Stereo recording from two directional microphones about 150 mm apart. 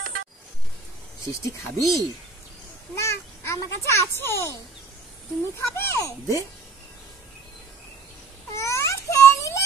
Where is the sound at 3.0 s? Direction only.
20° left (ahead or behind).